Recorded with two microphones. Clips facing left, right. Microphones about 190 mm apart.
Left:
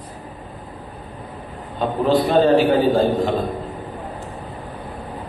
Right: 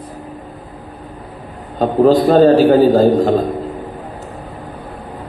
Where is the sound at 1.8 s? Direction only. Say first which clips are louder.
Right 7 dB; 40° right (ahead or behind).